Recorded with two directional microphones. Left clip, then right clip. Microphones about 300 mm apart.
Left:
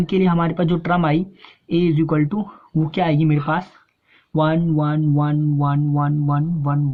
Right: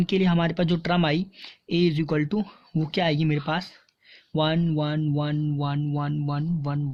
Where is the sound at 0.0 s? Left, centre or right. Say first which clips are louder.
Left 5 dB; right.